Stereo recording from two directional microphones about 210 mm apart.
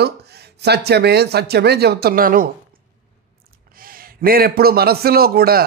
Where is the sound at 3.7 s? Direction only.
45° right (ahead or behind).